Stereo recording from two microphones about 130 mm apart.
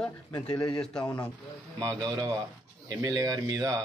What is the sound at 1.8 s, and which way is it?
A man's voice, 30° right (ahead or behind).